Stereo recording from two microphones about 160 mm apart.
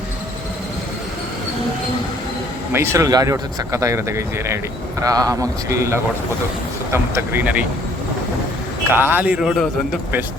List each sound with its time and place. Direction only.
2.7 s speech: 15° right (ahead or behind)
8.9 s speech: 10° right (ahead or behind)